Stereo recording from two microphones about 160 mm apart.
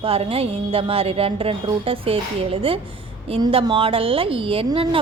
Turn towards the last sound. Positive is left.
turn(degrees=-35)  # may be behind; listen again after turning